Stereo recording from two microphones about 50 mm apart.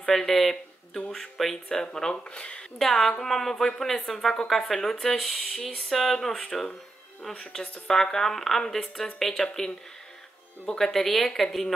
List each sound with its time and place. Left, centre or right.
0.0 s speech: centre
2.8 s speech: centre
7.6 s speech: left
7.9 s speech: centre
10.9 s speech: centre